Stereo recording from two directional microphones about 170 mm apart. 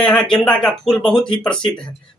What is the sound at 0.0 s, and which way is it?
Speech, 5° left (ahead or behind).